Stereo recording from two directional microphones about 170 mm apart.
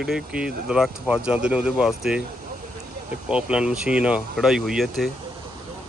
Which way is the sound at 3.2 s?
5° right (ahead or behind).